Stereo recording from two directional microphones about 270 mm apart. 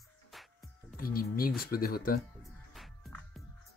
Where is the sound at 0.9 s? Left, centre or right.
Left.